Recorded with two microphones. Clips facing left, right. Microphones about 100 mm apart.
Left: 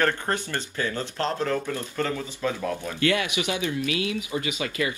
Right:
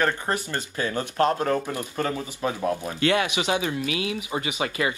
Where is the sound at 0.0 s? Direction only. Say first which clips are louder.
Even; 15° right (ahead or behind).